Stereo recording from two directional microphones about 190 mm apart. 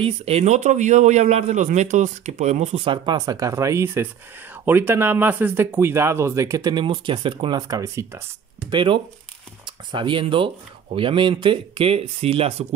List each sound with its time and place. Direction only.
0.0 s a man's voice: 30° right (ahead or behind); by 8.2 s 15° right (ahead or behind)
8.6 s speech: 25° right (ahead or behind)